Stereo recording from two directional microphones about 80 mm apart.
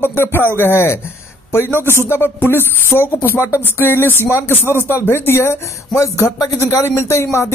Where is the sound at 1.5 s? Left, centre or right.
Left.